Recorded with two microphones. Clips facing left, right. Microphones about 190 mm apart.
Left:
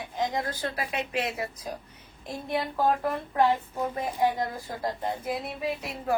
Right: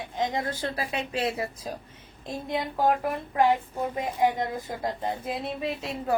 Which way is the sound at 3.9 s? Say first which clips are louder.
Right 2 dB; 20° right (ahead or behind).